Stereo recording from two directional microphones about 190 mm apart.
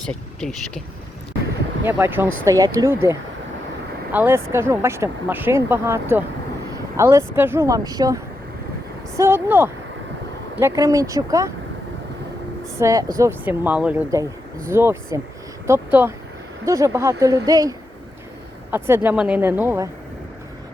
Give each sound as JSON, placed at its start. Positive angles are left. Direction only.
{"t": 0.0, "sound": "speech", "side_deg": 5}
{"t": 1.8, "sound": "speech", "side_deg": -10}
{"t": 12.8, "sound": "speech", "side_deg": -15}